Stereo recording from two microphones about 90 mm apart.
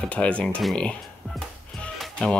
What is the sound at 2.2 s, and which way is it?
Speech, 10° left (ahead or behind).